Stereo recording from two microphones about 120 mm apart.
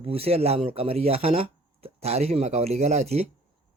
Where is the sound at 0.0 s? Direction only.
55° right (ahead or behind).